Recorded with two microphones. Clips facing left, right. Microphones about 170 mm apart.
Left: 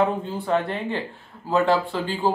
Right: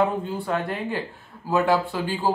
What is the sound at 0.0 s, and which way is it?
Speech, 5° right (ahead or behind).